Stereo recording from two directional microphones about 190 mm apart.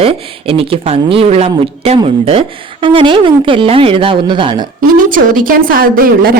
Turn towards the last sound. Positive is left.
turn(degrees=-50)  # may be behind; listen again after turning